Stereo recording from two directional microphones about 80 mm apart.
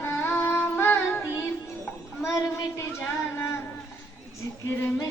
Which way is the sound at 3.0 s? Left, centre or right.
Left.